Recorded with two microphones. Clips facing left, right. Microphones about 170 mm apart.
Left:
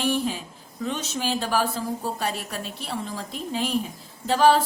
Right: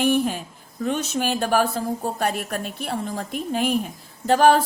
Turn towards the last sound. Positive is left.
turn(degrees=-55)  # may be behind; listen again after turning